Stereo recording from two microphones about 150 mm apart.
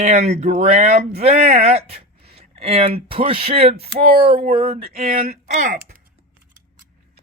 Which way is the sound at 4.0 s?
90° right.